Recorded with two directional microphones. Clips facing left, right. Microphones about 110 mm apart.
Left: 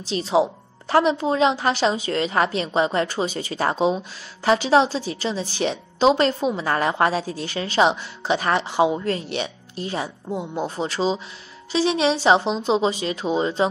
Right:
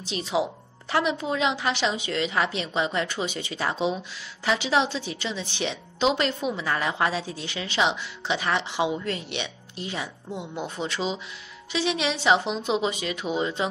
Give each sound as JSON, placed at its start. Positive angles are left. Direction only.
{"t": 0.0, "sound": "a woman's voice", "side_deg": 35}